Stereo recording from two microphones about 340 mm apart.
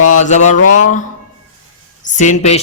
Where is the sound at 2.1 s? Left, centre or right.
Left.